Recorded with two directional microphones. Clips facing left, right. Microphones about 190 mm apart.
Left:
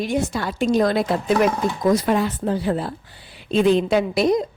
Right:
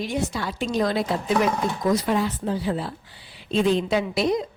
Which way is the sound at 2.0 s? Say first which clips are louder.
Left 3 dB; 55° left (ahead or behind).